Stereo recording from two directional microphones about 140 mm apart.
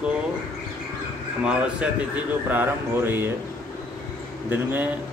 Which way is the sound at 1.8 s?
10° right (ahead or behind).